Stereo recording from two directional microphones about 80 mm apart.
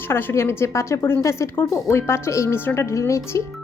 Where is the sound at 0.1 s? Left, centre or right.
Left.